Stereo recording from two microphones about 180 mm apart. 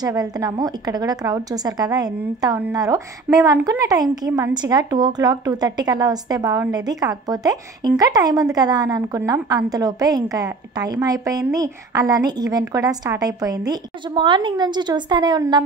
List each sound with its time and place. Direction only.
0.0 s a woman's voice: 20° right (ahead or behind)